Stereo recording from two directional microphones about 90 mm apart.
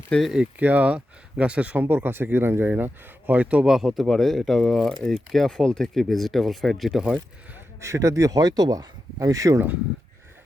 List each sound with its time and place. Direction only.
0.1 s speech: 15° left (ahead or behind)
0.6 s speech: 15° right (ahead or behind)
3.8 s speech: centre (ahead or behind)
7.8 s speech: 35° right (ahead or behind)